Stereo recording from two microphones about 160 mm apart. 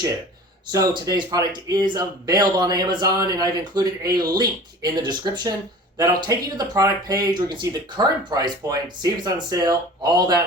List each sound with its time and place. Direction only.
0.7 s speech: 20° right (ahead or behind)